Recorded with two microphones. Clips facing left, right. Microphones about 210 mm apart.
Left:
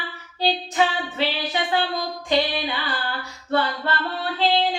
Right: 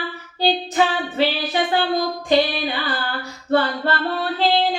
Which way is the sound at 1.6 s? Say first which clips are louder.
Right 3 dB; 50° right (ahead or behind).